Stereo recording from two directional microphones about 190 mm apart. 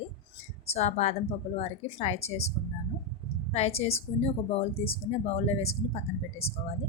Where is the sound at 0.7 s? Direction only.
35° left (ahead or behind).